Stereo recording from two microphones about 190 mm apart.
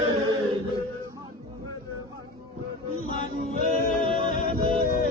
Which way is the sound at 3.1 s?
45° left (ahead or behind).